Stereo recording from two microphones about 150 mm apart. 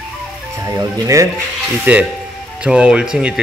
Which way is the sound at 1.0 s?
20° right (ahead or behind).